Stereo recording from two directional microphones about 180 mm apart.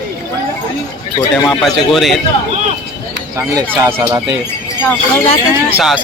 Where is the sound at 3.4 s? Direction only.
15° right (ahead or behind).